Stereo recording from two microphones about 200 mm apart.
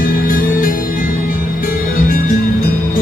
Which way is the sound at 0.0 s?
45° left (ahead or behind).